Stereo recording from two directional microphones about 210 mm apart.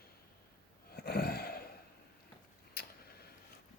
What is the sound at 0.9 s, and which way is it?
Gasp, 45° left (ahead or behind).